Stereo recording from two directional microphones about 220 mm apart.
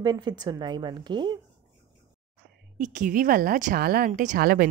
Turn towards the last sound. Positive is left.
turn(degrees=-45)  # may be behind; listen again after turning